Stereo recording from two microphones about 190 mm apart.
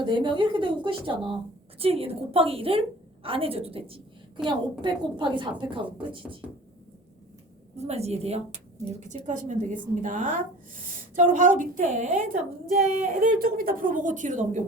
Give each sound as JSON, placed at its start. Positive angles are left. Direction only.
{"t": 0.0, "sound": "a woman's voice", "side_deg": -25}
{"t": 7.8, "sound": "a woman's voice", "side_deg": -35}